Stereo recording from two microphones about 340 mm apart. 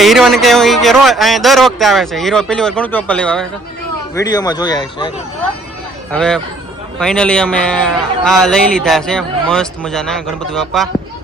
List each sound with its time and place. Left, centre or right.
0.0 s a man's voice: centre
6.1 s a man's voice: centre